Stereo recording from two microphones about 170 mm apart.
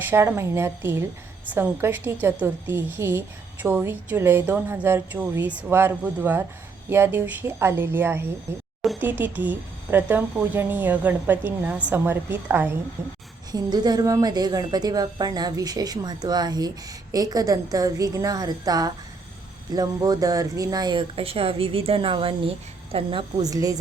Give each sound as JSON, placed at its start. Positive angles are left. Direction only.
{"t": 0.1, "sound": "a woman's voice", "side_deg": -15}